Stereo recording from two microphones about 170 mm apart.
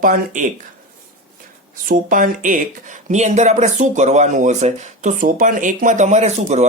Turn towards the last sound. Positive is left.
turn(degrees=-40)  # may be behind; listen again after turning